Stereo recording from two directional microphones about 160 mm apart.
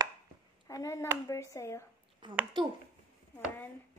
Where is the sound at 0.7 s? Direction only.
20° left (ahead or behind).